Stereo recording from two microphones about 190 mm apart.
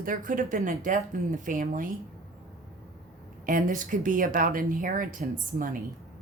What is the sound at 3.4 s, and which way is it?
Speech, 45° right (ahead or behind).